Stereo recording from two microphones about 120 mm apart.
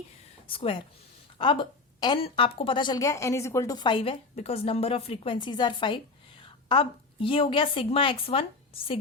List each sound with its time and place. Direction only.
0.4 s a woman's voice: 50° left (ahead or behind)
3.0 s a woman's voice: 25° left (ahead or behind); by 4.2 s 45° left (ahead or behind)
4.4 s a woman's voice: 55° left (ahead or behind)